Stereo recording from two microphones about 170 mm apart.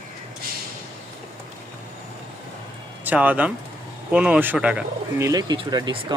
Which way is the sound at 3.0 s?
10° right (ahead or behind).